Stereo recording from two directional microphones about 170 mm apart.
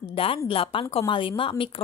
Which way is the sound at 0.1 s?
35° left (ahead or behind).